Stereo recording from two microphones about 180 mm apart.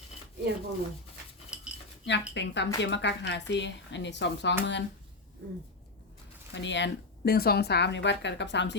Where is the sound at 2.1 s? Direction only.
80° left.